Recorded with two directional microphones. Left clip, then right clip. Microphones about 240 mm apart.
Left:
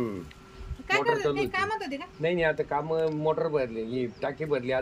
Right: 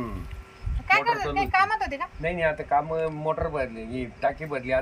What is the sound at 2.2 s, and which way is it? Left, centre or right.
Speech, centre.